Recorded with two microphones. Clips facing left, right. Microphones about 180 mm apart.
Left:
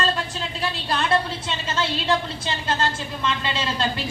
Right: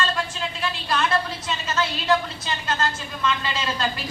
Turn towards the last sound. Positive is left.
turn(degrees=30)  # may be behind; listen again after turning